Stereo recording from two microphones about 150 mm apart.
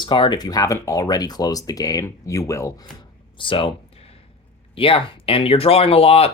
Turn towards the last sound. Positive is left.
turn(degrees=40)  # may be behind; listen again after turning